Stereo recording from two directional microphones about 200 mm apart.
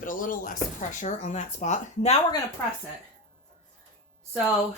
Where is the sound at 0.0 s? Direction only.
40° left (ahead or behind).